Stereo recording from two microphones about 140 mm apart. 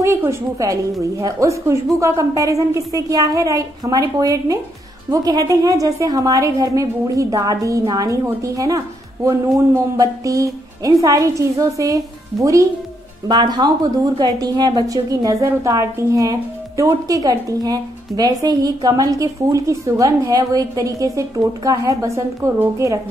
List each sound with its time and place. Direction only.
0.3 s a woman's voice: 25° right (ahead or behind)